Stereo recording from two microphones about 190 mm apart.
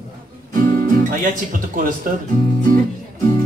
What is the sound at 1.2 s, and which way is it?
Speech, 45° right (ahead or behind).